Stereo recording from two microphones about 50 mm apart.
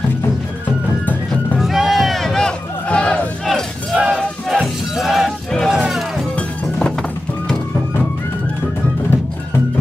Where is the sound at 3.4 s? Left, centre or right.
Centre.